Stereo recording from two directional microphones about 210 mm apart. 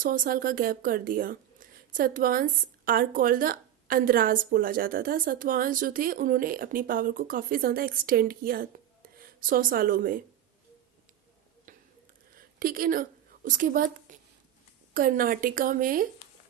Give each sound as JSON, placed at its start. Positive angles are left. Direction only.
{"t": 0.0, "sound": "a woman's voice", "side_deg": -45}
{"t": 12.5, "sound": "a woman's voice", "side_deg": -40}